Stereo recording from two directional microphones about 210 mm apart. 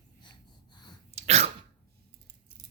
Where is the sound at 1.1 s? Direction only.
30° right (ahead or behind).